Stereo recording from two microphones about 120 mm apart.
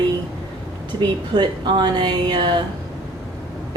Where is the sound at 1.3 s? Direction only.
40° right (ahead or behind).